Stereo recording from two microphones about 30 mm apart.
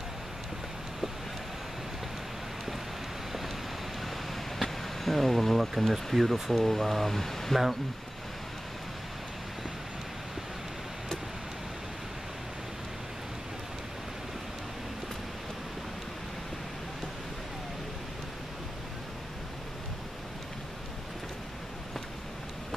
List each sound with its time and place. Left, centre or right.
4.6 s speech: centre
6.6 s speech: centre